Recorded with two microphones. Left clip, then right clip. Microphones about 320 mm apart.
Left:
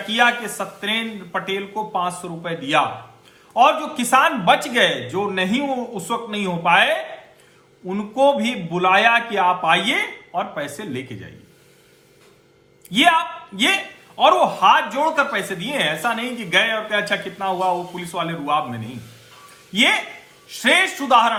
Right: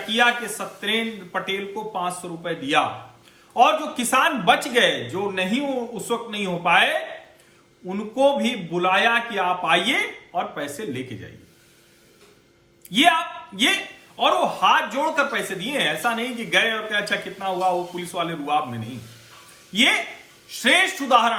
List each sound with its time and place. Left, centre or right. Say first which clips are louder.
0.1 s a man's voice: left 2 dB; centre
12.9 s a man's voice: left 2 dB; centre